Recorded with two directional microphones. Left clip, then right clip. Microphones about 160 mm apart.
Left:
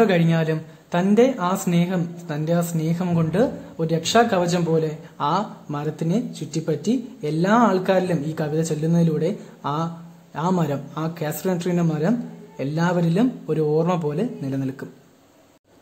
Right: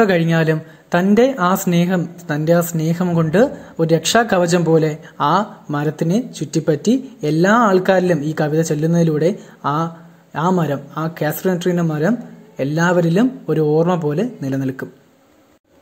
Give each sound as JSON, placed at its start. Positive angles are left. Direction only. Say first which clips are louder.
{"t": 0.0, "sound": "speech", "louder": "right 4 dB", "side_deg": -30}